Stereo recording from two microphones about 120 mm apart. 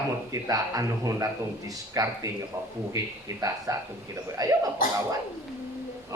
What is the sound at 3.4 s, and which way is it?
Speech, 30° right (ahead or behind).